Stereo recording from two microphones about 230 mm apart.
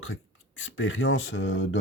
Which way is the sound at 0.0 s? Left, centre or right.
Left.